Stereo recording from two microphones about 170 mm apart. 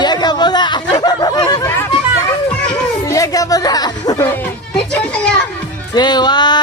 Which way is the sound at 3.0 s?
20° left (ahead or behind).